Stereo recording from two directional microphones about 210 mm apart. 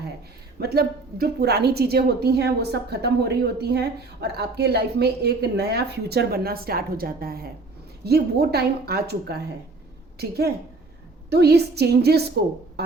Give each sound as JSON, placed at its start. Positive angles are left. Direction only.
{"t": 0.6, "sound": "a woman's voice", "side_deg": -50}